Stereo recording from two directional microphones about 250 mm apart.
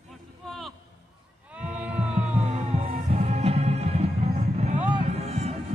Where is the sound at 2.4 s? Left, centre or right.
Right.